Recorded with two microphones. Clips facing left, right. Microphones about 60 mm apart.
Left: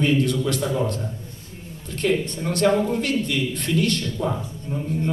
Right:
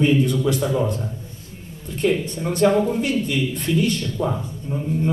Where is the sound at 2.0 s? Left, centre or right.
Centre.